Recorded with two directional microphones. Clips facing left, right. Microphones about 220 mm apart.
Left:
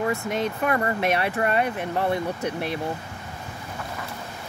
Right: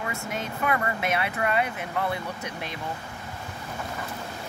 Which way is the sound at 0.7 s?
40° left (ahead or behind).